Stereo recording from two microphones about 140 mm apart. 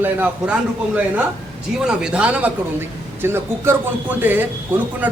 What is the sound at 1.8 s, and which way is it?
A man's voice, 5° right (ahead or behind).